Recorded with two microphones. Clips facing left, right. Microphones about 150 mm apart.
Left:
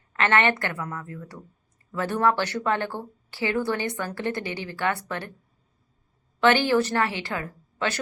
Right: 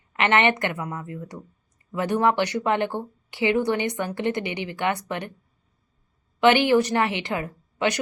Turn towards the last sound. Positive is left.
turn(degrees=-15)  # may be behind; listen again after turning